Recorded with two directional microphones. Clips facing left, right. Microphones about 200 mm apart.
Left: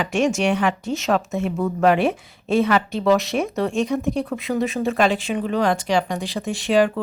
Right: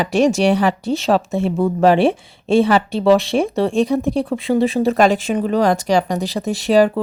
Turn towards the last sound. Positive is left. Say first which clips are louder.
# right 4 dB
turn(degrees=-35)  # may be behind; listen again after turning